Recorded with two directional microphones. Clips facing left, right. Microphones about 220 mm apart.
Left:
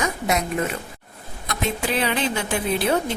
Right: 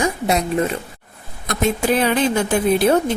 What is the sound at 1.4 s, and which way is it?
Speech, 45° right (ahead or behind).